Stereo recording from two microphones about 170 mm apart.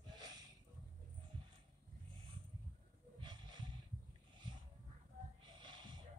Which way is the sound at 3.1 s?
25° right (ahead or behind).